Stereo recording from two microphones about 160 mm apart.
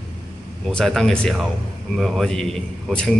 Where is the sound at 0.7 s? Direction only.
5° left (ahead or behind).